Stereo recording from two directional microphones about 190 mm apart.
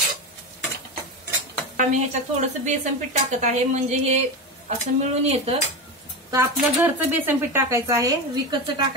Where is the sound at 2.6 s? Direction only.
40° right (ahead or behind).